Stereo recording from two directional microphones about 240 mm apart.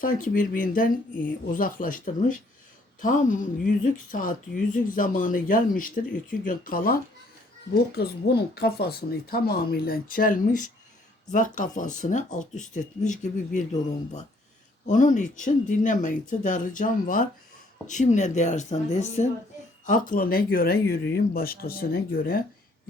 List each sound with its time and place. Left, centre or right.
0.0 s speech: left
14.8 s speech: left